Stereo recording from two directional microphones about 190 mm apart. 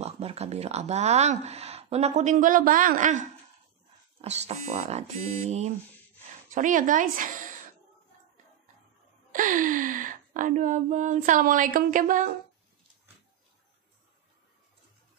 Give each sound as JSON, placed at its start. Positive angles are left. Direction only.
{"t": 0.0, "sound": "speech", "side_deg": -35}
{"t": 9.3, "sound": "speech", "side_deg": -45}